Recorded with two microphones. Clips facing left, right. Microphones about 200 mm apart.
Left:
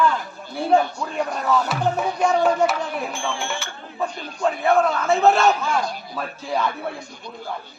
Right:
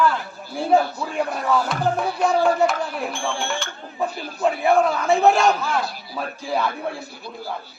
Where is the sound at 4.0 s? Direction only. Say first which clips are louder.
Right 1 dB; 15° right (ahead or behind).